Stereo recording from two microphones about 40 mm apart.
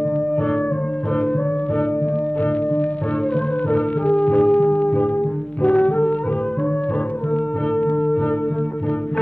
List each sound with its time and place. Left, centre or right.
3.7 s music: left
5.6 s brass instrument: left
7.7 s music: left